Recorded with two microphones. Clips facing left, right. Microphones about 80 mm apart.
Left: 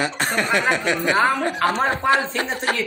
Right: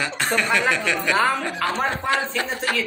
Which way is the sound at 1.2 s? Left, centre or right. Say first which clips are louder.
Left 3 dB; left.